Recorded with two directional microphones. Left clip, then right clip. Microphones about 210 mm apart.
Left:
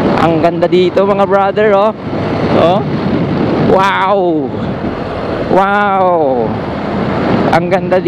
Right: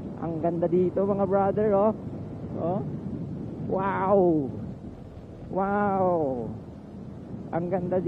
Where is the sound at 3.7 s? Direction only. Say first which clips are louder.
Left 13 dB; 10° left (ahead or behind).